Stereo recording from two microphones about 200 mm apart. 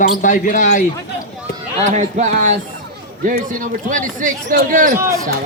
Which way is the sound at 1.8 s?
35° right (ahead or behind).